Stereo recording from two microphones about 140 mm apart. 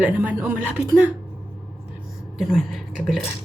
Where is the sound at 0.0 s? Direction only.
15° right (ahead or behind).